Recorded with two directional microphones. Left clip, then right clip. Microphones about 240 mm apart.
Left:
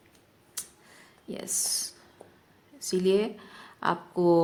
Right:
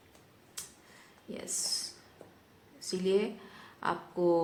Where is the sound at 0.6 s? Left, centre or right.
Left.